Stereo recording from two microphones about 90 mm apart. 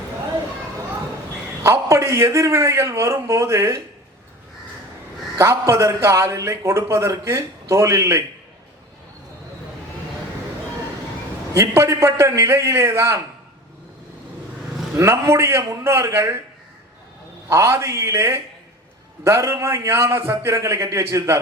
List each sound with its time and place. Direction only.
1.6 s a man's voice: 30° right (ahead or behind)
5.4 s a man's voice: 30° right (ahead or behind)
11.5 s a man's voice: 30° right (ahead or behind)
14.9 s a man's voice: 35° right (ahead or behind)
17.5 s a man's voice: 30° right (ahead or behind)